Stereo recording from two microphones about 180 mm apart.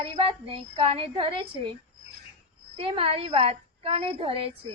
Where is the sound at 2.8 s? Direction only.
30° right (ahead or behind).